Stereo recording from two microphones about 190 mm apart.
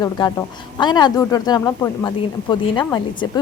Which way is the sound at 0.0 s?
20° left (ahead or behind).